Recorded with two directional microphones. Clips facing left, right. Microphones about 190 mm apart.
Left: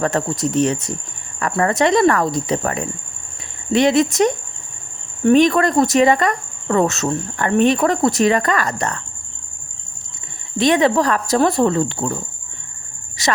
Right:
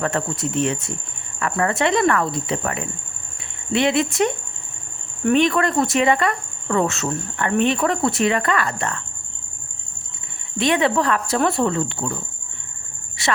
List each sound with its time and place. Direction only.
0.0 s cricket: 40° left (ahead or behind)
10.6 s cricket: 40° left (ahead or behind)
13.2 s speech: 40° left (ahead or behind)